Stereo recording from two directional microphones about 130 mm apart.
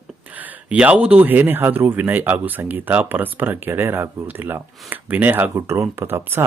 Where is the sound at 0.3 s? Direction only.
10° right (ahead or behind).